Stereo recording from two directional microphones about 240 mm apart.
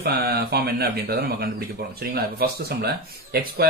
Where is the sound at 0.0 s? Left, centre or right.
Right.